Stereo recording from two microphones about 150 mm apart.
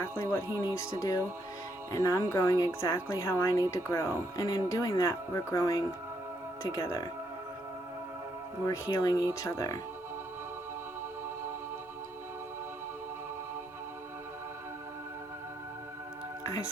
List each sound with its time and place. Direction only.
0.0 s a woman's voice: 20° left (ahead or behind)
8.6 s a woman's voice: 20° left (ahead or behind)
16.4 s music: 20° left (ahead or behind)